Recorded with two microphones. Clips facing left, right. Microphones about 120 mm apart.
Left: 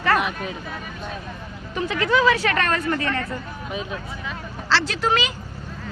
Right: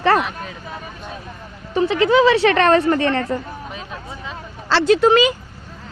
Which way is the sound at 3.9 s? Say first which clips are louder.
Even; 25° right (ahead or behind).